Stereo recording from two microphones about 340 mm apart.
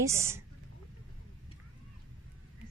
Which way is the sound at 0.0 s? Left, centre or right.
Centre.